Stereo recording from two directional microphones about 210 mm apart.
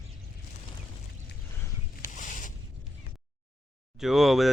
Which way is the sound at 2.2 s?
35° left (ahead or behind).